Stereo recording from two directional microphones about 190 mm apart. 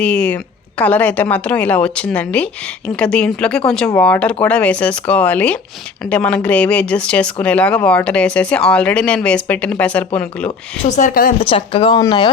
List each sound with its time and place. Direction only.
0.0 s a woman's voice: 5° left (ahead or behind)
10.8 s speech: 40° left (ahead or behind)
11.3 s speech: 30° left (ahead or behind)